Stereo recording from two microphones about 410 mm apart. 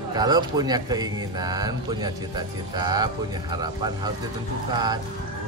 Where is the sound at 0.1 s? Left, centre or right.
Centre.